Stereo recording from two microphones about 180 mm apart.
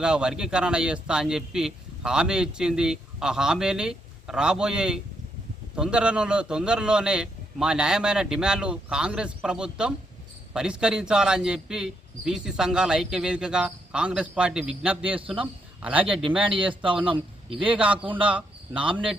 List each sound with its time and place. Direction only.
0.0 s a man's voice: 5° right (ahead or behind)
16.6 s a man's voice: 30° right (ahead or behind)
17.7 s speech: 5° right (ahead or behind)
17.9 s speech: 30° right (ahead or behind)
18.2 s speech: 5° right (ahead or behind)